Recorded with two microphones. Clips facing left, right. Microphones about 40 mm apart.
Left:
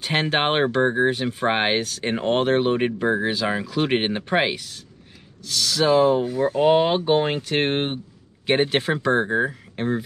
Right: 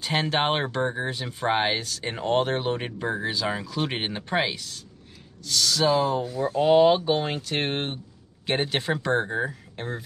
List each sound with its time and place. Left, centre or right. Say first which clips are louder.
0.0 s speech: left 3 dB; left
5.5 s speech: left 2 dB; centre
5.9 s speech: left 8 dB; left